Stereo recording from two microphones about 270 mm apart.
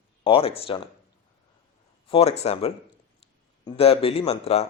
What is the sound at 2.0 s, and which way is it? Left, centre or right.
Speech, left.